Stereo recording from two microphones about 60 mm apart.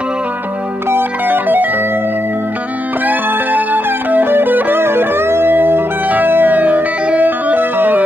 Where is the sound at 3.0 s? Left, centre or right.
Right.